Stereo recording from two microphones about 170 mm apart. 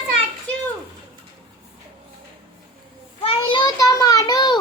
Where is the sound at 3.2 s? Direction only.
30° left (ahead or behind).